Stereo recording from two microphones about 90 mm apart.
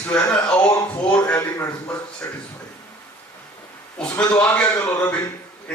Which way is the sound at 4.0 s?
10° left (ahead or behind).